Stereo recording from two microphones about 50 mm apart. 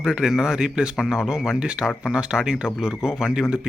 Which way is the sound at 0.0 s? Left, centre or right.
Centre.